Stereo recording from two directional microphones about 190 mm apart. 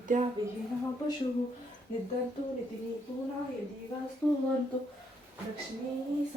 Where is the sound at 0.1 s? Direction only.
40° right (ahead or behind).